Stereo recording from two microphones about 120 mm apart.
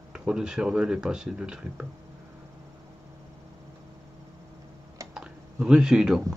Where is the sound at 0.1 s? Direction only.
5° right (ahead or behind).